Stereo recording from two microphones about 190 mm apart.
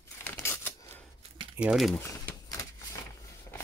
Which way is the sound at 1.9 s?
15° left (ahead or behind).